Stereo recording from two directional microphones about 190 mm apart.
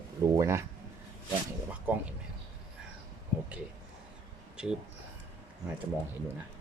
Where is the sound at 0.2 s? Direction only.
15° right (ahead or behind).